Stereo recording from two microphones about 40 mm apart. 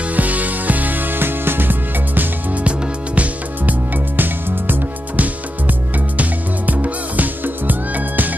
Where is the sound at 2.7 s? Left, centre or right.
Right.